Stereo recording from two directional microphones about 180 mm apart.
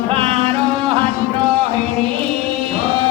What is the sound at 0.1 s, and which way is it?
Music, 30° right (ahead or behind).